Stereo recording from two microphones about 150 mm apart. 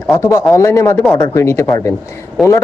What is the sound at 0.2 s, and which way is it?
A woman's voice, 20° left (ahead or behind).